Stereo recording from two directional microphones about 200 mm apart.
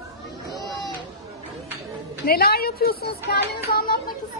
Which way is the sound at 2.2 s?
50° left (ahead or behind).